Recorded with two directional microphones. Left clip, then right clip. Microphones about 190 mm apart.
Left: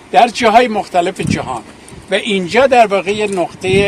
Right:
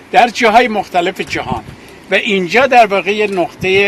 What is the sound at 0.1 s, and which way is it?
A man's voice, 10° left (ahead or behind).